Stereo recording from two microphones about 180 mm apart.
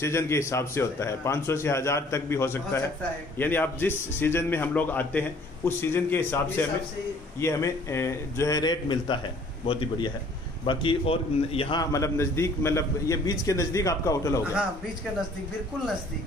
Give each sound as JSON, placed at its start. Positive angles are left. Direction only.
{"t": 0.0, "sound": "a man's voice", "side_deg": 15}